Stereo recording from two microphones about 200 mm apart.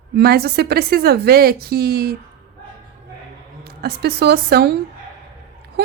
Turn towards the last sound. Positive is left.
turn(degrees=-50)  # may be behind; listen again after turning